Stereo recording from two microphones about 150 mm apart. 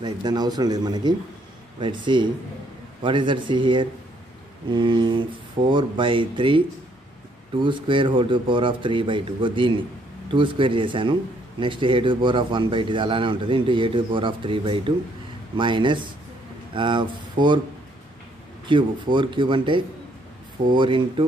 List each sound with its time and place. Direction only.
0.0 s a man's voice: 30° right (ahead or behind)
7.6 s a man's voice: 35° right (ahead or behind)
18.7 s a man's voice: 35° right (ahead or behind)